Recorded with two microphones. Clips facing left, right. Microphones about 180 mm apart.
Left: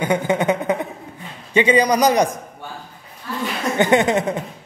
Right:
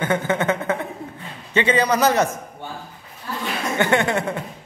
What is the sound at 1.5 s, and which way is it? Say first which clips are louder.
Speech: left 3 dB; 15° left (ahead or behind).